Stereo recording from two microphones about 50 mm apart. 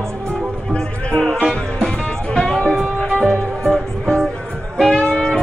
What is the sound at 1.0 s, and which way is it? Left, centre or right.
Music, centre.